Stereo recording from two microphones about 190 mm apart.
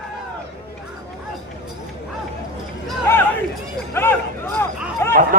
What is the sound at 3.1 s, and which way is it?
Speech, 10° left (ahead or behind).